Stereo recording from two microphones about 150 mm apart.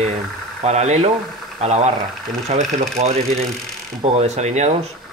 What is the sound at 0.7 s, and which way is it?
Speech, 45° right (ahead or behind).